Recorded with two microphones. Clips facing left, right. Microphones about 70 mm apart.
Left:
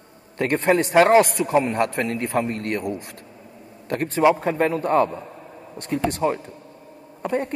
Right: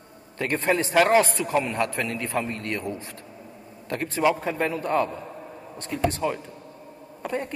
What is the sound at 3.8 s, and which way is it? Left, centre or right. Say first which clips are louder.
A man's voice: left 5 dB; left.